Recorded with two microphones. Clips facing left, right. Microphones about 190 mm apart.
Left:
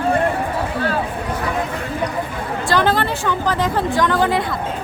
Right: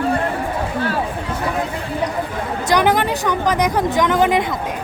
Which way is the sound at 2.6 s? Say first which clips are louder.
Right 2 dB; 15° right (ahead or behind).